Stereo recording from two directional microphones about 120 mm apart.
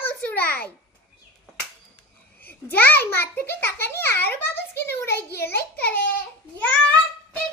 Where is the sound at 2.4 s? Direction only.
15° left (ahead or behind).